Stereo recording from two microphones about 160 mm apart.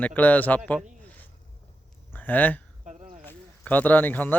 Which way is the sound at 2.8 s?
45° right (ahead or behind).